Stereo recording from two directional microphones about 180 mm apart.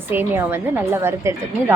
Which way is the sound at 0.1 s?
10° right (ahead or behind).